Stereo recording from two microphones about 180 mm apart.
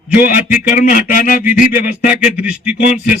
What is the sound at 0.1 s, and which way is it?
Music, 50° left (ahead or behind).